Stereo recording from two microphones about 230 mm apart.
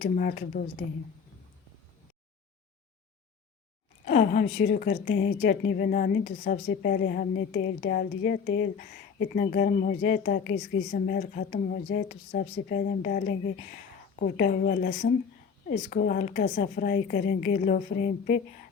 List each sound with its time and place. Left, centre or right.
0.0 s a woman's voice: left
4.0 s a woman's voice: left